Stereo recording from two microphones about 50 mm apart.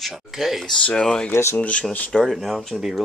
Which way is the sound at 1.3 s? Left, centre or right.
Left.